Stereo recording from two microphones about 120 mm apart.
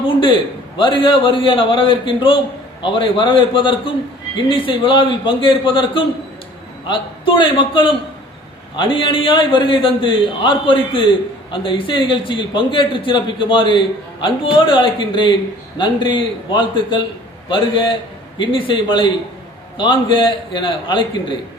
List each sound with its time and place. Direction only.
0.8 s a man's voice: 45° left (ahead or behind)